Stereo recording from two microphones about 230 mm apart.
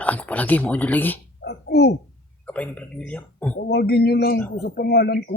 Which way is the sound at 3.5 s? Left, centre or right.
Left.